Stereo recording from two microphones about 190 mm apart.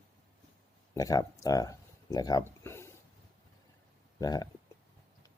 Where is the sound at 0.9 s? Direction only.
20° left (ahead or behind).